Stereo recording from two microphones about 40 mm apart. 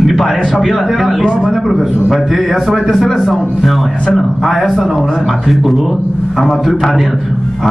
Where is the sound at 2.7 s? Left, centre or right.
Centre.